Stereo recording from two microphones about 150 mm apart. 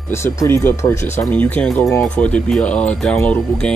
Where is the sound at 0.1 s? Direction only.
15° left (ahead or behind).